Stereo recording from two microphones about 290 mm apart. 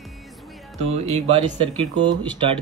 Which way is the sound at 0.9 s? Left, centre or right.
Right.